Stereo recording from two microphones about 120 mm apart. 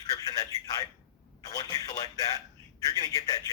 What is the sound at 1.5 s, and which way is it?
A man's voice, 30° left (ahead or behind).